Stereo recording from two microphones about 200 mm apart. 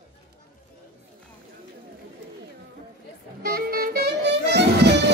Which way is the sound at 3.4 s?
50° right (ahead or behind).